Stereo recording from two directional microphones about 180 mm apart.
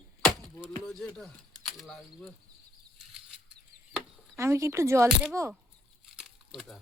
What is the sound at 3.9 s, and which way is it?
Chopping, 15° right (ahead or behind).